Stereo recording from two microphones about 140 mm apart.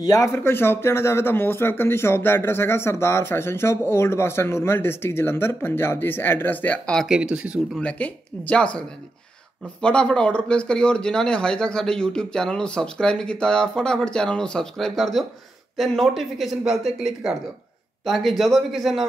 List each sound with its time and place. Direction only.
0.0 s speech: 25° left (ahead or behind); by 7.1 s 10° left (ahead or behind)
7.1 s speech: 5° right (ahead or behind)
7.7 s speech: 10° left (ahead or behind)